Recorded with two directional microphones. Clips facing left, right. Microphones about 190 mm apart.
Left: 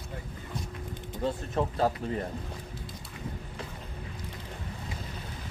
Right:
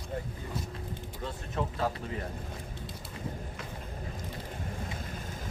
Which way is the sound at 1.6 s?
35° left (ahead or behind).